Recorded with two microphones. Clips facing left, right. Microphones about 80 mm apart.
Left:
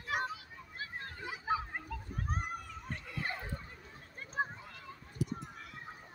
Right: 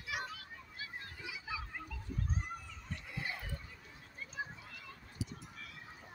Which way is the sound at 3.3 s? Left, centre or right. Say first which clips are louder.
Left 4 dB; left.